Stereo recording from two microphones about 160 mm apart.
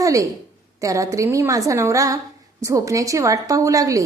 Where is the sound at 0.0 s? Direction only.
20° right (ahead or behind).